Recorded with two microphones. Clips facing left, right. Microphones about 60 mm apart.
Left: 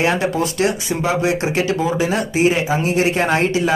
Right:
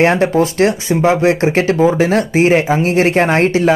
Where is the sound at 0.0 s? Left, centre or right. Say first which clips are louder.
Right 6 dB; right.